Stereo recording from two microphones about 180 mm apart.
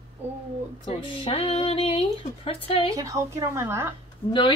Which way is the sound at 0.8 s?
30° left (ahead or behind).